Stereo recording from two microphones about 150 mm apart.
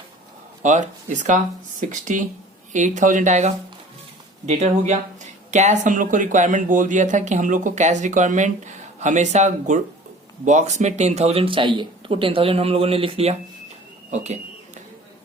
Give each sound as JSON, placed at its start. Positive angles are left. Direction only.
{"t": 0.6, "sound": "speech", "side_deg": -55}